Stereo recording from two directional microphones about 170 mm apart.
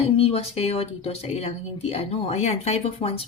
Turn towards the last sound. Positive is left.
turn(degrees=35)  # may be behind; listen again after turning